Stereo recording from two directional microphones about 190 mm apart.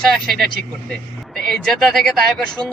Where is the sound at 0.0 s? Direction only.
Centre (ahead or behind).